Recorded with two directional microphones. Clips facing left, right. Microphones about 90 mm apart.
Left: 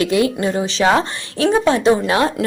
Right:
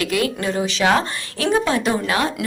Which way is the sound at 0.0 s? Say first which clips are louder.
Left 5 dB; 25° left (ahead or behind).